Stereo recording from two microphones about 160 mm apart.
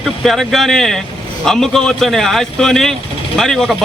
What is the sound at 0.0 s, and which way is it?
A man's voice, centre (ahead or behind).